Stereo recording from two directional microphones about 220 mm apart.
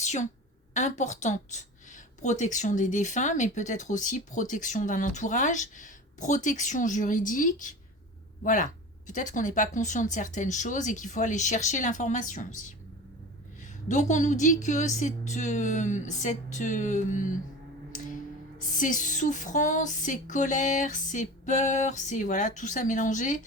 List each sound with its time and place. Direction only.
0.0 s a sound: 30° left (ahead or behind)
0.7 s speech: 35° left (ahead or behind)
13.8 s speech: 35° left (ahead or behind)
18.8 s speech: 35° left (ahead or behind)